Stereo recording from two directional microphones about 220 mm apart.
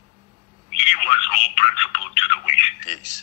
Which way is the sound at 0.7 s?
35° left (ahead or behind).